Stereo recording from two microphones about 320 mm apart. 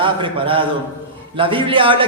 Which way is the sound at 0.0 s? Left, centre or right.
Centre.